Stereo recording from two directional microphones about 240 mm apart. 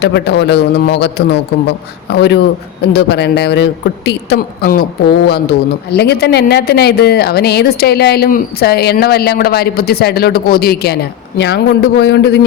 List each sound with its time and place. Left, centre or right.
0.0 s a man's voice: left